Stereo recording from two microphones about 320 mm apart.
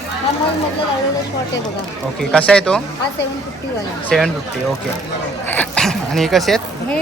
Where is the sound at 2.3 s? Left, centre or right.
Centre.